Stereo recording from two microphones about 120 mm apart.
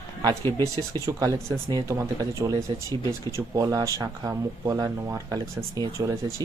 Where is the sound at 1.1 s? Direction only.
30° right (ahead or behind).